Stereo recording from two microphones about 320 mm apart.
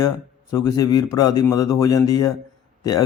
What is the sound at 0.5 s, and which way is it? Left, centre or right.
Speech, centre.